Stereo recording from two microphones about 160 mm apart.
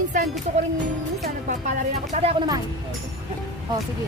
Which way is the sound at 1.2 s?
50° right (ahead or behind).